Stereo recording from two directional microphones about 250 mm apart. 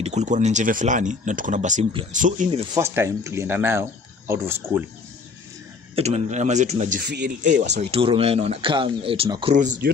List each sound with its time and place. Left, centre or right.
0.0 s speech: right
2.7 s speech: centre
5.9 s speech: right
7.8 s speech: right